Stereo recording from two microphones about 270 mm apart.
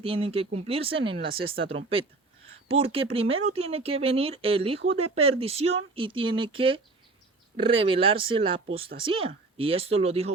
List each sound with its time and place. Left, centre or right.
0.0 s speech: right